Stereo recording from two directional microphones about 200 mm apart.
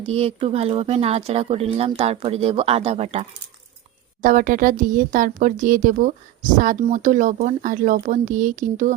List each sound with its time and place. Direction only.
0.0 s speech: 30° right (ahead or behind)